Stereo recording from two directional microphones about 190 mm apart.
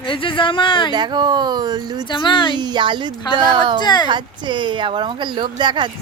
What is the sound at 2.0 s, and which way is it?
Speech, 25° left (ahead or behind).